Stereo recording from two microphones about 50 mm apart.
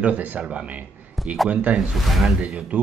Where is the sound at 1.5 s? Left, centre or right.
Right.